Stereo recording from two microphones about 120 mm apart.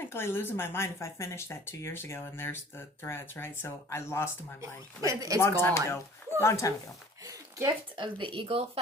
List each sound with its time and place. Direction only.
0.1 s speech: 20° left (ahead or behind)
4.6 s speech: 30° right (ahead or behind)
5.4 s speech: 20° left (ahead or behind)
7.9 s speech: 45° right (ahead or behind)